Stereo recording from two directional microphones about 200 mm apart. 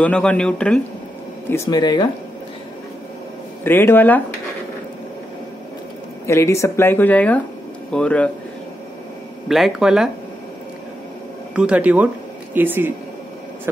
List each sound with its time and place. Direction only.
0.0 s speech: 5° left (ahead or behind)
1.5 s speech: 15° left (ahead or behind)
3.6 s speech: 10° left (ahead or behind)
6.2 s speech: 15° left (ahead or behind)
9.5 s speech: centre (ahead or behind)
11.5 s speech: 5° right (ahead or behind)